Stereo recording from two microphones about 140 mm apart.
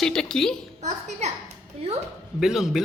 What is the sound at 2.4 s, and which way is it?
Speech, 5° right (ahead or behind).